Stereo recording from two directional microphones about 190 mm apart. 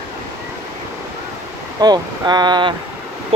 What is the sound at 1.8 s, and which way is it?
Speech, 20° right (ahead or behind).